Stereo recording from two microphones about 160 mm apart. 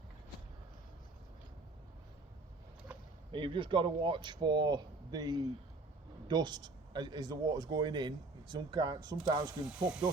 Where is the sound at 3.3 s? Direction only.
30° right (ahead or behind).